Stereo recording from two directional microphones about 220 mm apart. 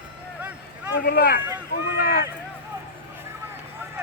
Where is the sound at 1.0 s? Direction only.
45° left (ahead or behind).